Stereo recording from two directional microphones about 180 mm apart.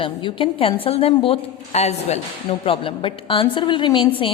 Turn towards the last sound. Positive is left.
turn(degrees=25)  # may be behind; listen again after turning